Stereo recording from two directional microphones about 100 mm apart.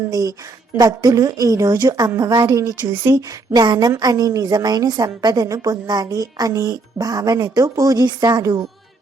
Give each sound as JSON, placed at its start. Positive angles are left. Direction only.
{"t": 0.1, "sound": "speech", "side_deg": -40}
{"t": 2.9, "sound": "speech", "side_deg": -25}
{"t": 3.2, "sound": "speech", "side_deg": -40}
{"t": 5.8, "sound": "speech", "side_deg": -45}